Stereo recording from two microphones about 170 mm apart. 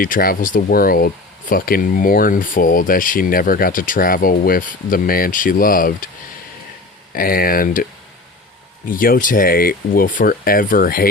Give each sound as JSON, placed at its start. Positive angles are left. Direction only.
{"t": 0.0, "sound": "speech", "side_deg": 55}
{"t": 7.1, "sound": "speech", "side_deg": 55}
{"t": 8.9, "sound": "speech", "side_deg": 55}